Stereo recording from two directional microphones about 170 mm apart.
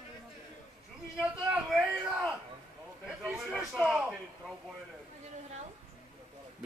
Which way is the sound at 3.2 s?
Centre (ahead or behind).